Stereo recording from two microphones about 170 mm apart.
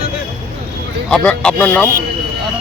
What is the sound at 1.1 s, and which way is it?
Speech, 5° left (ahead or behind).